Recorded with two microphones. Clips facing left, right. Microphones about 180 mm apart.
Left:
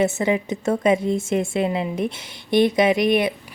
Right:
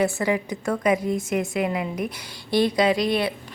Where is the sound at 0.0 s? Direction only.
20° left (ahead or behind).